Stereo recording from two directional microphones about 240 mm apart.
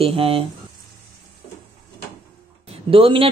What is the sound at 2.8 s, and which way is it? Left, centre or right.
Speech, right.